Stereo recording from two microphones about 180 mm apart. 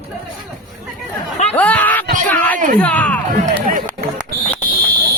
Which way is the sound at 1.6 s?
10° left (ahead or behind).